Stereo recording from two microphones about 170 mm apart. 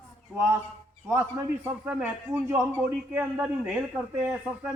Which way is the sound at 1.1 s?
10° right (ahead or behind).